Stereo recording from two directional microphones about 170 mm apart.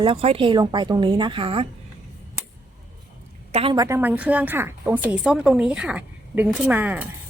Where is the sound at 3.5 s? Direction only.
35° right (ahead or behind).